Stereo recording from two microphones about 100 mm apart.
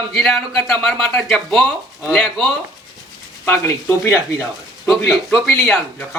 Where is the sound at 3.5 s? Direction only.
20° left (ahead or behind).